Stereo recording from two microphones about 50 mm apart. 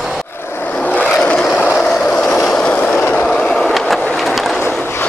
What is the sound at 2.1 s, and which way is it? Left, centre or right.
Vehicle, centre.